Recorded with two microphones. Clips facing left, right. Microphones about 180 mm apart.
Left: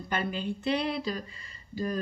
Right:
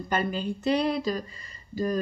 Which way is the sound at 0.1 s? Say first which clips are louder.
Right 3 dB; 40° right (ahead or behind).